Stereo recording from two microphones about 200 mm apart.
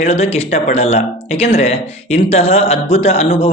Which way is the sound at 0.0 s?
30° left (ahead or behind).